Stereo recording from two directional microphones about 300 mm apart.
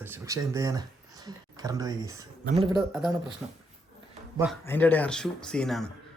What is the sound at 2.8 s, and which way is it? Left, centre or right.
Speech, centre.